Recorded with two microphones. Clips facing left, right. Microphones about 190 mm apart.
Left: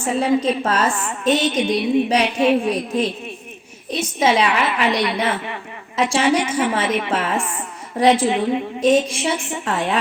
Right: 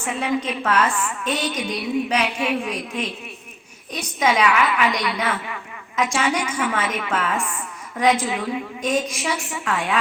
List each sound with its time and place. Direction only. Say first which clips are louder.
0.0 s a woman's voice: left 6 dB; 35° left (ahead or behind)
4.2 s a woman's voice: left 1 dB; 30° left (ahead or behind)